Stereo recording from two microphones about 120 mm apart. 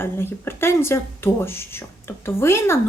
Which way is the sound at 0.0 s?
20° left (ahead or behind).